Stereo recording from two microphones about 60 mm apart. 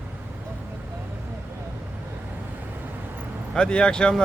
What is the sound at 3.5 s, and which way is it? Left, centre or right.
Speech, centre.